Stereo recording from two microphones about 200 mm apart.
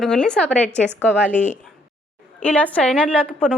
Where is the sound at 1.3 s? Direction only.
35° left (ahead or behind).